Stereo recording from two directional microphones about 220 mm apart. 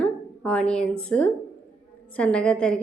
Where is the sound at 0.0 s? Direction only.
5° left (ahead or behind).